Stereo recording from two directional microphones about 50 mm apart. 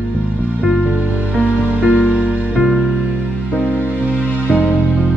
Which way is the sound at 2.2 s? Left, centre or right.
Centre.